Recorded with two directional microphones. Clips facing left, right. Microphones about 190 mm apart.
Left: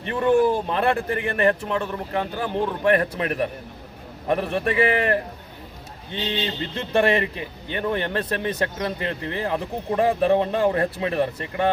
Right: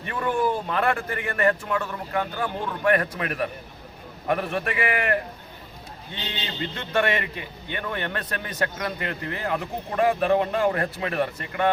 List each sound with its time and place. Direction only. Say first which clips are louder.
0.1 s a man's voice: left 6 dB; 30° left (ahead or behind)
6.2 s a man's voice: left 5 dB; 30° left (ahead or behind)